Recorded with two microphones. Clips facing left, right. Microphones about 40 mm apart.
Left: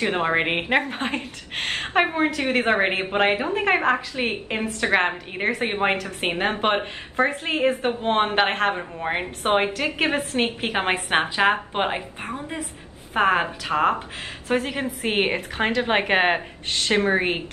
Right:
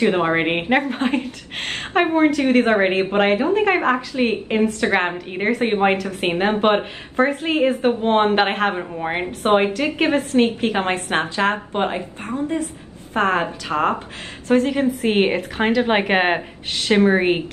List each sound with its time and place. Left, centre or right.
0.1 s a woman's voice: centre; by 12.0 s left
12.3 s a woman's voice: centre
13.7 s a woman's voice: centre
14.5 s a woman's voice: centre